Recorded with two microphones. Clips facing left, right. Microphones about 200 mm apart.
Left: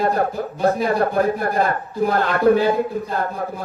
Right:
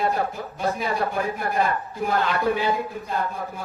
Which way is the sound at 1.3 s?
40° left (ahead or behind).